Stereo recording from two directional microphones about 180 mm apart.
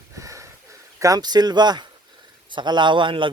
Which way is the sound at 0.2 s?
15° right (ahead or behind).